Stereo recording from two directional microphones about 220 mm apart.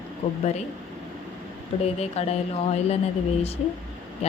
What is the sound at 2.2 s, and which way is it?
Speech, 30° left (ahead or behind).